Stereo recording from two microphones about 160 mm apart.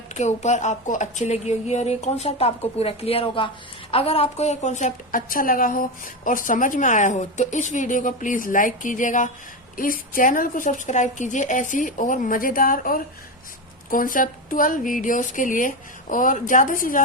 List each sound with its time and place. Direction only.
0.1 s a woman's voice: 45° left (ahead or behind)